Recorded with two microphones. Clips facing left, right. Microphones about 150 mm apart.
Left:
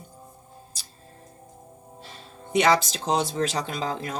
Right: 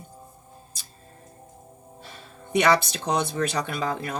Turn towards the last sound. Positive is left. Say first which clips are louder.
# right 1 dB
turn(degrees=-60)  # may be behind; listen again after turning